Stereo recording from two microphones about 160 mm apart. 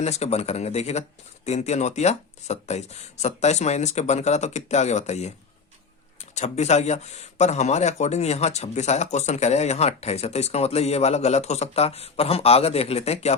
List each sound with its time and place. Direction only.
0.0 s speech: 40° left (ahead or behind)